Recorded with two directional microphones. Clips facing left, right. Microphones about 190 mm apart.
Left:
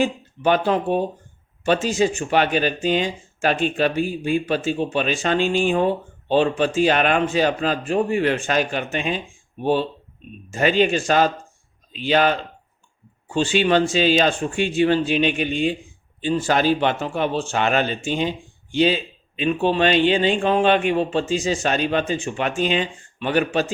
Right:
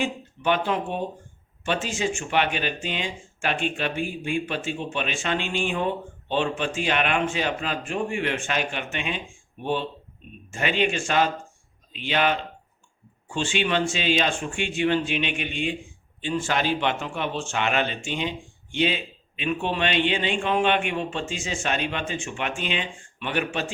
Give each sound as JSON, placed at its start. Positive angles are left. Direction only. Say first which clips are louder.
{"t": 0.0, "sound": "speech", "louder": "left 6 dB", "side_deg": 40}
{"t": 10.5, "sound": "speech", "louder": "left 7 dB", "side_deg": 35}